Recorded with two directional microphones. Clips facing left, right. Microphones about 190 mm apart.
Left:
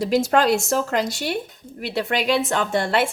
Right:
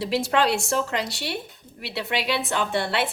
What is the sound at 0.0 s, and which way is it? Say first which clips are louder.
A woman's voice: left 4 dB; 45° left (ahead or behind).